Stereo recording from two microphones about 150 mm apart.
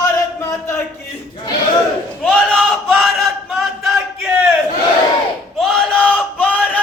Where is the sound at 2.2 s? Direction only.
5° left (ahead or behind).